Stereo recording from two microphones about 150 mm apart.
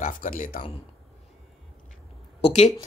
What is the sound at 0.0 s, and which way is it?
Speech, 60° left (ahead or behind).